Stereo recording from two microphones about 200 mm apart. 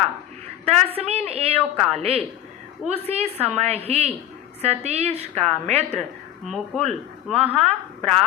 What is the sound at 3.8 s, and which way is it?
A woman's voice, 30° right (ahead or behind).